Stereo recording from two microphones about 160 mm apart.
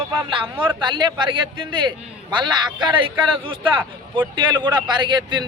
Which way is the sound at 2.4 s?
30° right (ahead or behind).